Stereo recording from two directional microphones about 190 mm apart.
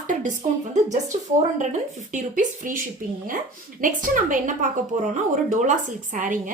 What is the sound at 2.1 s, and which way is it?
A woman's voice, 45° right (ahead or behind).